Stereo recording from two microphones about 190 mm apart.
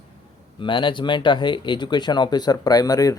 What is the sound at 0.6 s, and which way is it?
Speech, 25° left (ahead or behind).